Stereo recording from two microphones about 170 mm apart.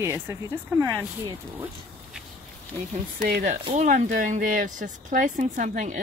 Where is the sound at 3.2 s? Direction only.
50° right (ahead or behind).